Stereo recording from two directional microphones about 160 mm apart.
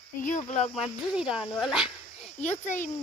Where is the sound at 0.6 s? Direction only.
Centre (ahead or behind).